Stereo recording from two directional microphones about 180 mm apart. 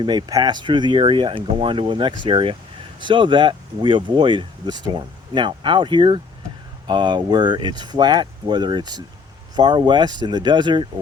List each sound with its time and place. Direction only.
0.0 s speech: 25° right (ahead or behind)